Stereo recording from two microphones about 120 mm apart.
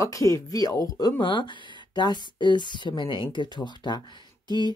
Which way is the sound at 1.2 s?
40° left (ahead or behind).